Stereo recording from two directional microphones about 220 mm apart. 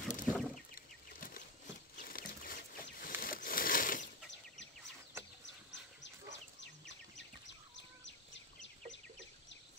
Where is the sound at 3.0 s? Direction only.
40° left (ahead or behind).